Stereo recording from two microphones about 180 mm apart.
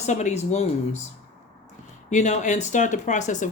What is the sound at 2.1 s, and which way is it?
Speech, 40° left (ahead or behind).